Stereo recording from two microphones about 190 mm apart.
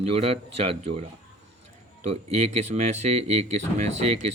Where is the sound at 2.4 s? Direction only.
35° right (ahead or behind).